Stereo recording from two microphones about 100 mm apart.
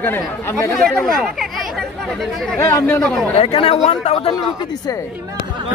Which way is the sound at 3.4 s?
75° left (ahead or behind).